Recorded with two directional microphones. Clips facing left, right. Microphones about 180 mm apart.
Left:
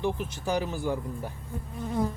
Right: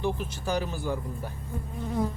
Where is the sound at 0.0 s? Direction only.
20° left (ahead or behind).